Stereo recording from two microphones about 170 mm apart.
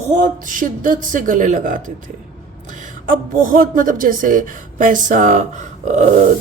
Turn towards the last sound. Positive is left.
turn(degrees=-45)  # may be behind; listen again after turning